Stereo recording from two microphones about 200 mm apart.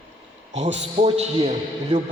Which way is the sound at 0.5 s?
35° right (ahead or behind).